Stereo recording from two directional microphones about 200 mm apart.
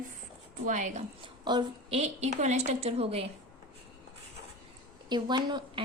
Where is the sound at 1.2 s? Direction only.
20° right (ahead or behind).